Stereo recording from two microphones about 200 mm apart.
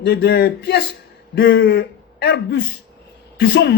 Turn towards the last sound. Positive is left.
turn(degrees=60)  # may be behind; listen again after turning